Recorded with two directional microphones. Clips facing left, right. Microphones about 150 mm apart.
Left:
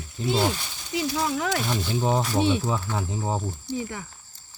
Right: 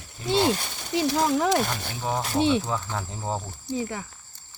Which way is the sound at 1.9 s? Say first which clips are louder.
Left 5 dB; 25° left (ahead or behind).